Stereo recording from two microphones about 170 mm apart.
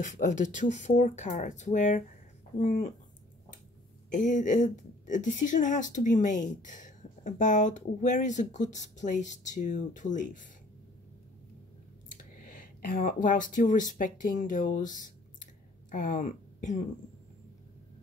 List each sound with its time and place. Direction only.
0.0 s a woman's voice: 45° left (ahead or behind)
4.1 s a woman's voice: 50° left (ahead or behind)
12.1 s speech: 50° left (ahead or behind)